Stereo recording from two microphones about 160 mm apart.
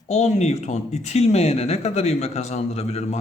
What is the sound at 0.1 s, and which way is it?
A man's voice, 45° left (ahead or behind).